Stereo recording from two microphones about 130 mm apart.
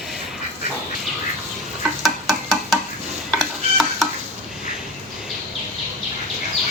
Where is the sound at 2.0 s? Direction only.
Centre (ahead or behind).